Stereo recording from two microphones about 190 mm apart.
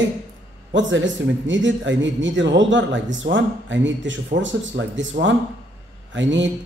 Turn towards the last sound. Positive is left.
turn(degrees=-75)  # may be behind; listen again after turning